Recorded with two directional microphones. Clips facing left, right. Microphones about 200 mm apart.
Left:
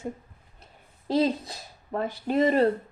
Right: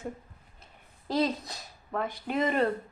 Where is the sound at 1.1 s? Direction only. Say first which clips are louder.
Left 4 dB; 30° left (ahead or behind).